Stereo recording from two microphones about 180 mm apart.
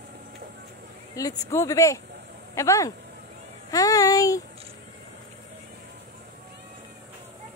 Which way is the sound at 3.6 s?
20° left (ahead or behind).